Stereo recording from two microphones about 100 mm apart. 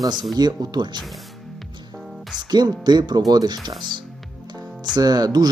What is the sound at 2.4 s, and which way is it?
Speech, 45° right (ahead or behind).